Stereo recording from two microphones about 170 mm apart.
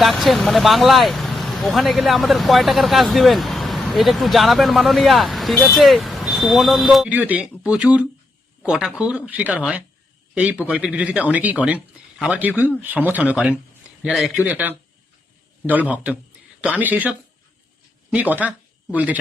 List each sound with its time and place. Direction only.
0.0 s speech: centre (ahead or behind)